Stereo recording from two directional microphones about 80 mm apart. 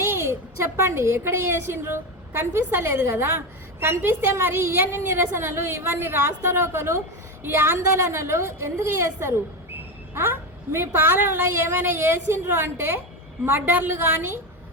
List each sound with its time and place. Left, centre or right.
0.0 s a woman's voice: right